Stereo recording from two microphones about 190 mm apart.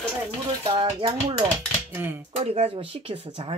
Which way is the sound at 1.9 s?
10° right (ahead or behind).